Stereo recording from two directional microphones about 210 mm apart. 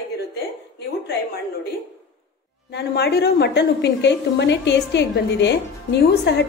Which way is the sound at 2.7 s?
50° left (ahead or behind).